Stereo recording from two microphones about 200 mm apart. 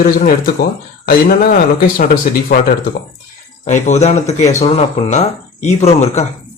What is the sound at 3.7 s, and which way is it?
Speech, 35° left (ahead or behind).